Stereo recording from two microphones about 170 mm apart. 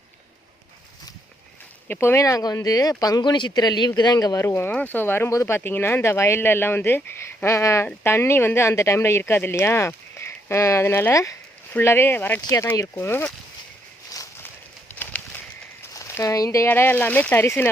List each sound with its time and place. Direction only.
1.9 s speech: 15° left (ahead or behind)
14.1 s walk: 20° left (ahead or behind)
16.0 s speech: 20° left (ahead or behind)